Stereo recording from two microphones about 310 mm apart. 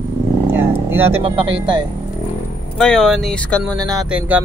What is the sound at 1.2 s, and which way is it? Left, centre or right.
Speech, centre.